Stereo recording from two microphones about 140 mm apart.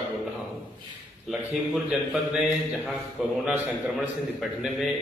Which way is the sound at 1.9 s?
5° right (ahead or behind).